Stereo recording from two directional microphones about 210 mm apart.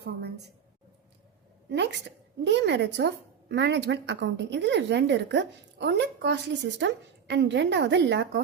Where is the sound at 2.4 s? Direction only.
55° right (ahead or behind).